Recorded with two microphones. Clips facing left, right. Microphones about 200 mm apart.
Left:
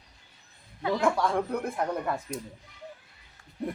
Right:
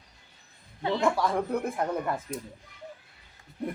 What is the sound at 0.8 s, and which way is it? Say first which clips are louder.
Speech: even; 30° right (ahead or behind).